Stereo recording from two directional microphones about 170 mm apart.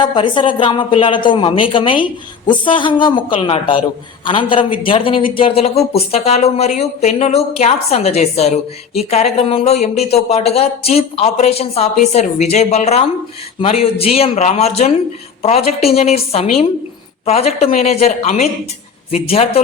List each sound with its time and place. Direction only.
0.1 s a woman's voice: 30° left (ahead or behind)